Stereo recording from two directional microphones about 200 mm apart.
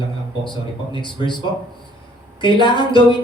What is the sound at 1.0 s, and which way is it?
Speech, 25° left (ahead or behind).